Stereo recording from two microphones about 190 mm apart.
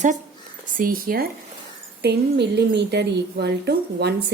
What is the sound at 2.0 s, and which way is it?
A woman's voice, 60° right (ahead or behind).